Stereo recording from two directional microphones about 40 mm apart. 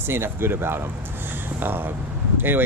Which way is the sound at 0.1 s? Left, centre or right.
Right.